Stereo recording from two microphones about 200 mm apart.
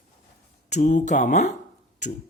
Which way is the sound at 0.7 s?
40° left (ahead or behind).